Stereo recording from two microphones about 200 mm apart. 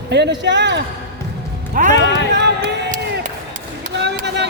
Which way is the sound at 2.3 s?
55° right (ahead or behind).